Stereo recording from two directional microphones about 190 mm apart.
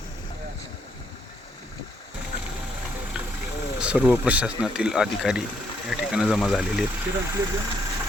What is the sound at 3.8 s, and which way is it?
Speech, 5° right (ahead or behind).